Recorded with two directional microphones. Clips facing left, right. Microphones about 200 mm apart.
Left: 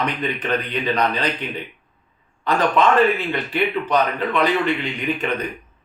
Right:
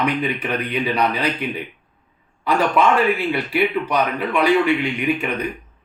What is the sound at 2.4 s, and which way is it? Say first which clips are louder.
Speech: even; 10° right (ahead or behind).